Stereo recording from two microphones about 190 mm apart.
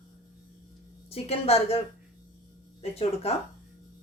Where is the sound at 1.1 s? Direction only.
30° left (ahead or behind).